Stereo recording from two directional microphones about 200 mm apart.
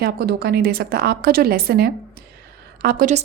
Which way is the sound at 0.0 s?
50° right (ahead or behind).